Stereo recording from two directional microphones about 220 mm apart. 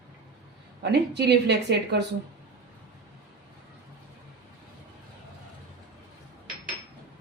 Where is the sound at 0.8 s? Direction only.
50° right (ahead or behind).